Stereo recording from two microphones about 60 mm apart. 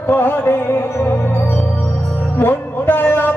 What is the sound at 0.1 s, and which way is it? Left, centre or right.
Music, left.